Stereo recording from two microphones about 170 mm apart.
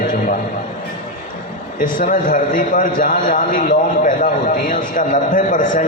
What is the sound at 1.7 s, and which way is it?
A man's voice, 55° left (ahead or behind).